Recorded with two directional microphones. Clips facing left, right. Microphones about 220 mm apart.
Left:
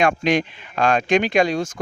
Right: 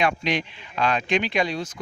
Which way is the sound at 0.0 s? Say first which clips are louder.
Left 6 dB; 45° left (ahead or behind).